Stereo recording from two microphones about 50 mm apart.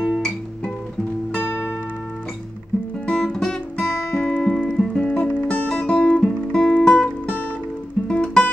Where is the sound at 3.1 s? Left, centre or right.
Centre.